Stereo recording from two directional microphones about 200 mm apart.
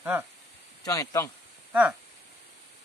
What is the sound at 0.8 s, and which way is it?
Speech, 15° left (ahead or behind).